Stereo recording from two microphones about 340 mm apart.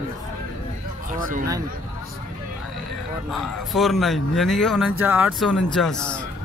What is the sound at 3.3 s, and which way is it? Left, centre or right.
Speech, centre.